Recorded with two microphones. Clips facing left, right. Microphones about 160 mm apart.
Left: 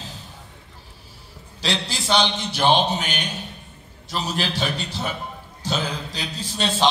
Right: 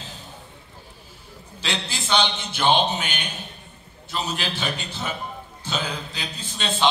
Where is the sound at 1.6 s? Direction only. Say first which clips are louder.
Left 3 dB; 35° left (ahead or behind).